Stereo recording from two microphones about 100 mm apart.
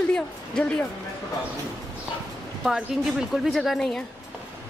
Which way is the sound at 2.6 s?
5° right (ahead or behind).